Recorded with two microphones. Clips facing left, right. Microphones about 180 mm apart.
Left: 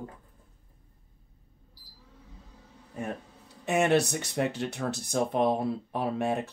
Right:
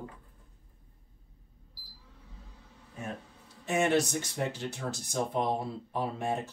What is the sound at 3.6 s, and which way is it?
Speech, 65° left (ahead or behind).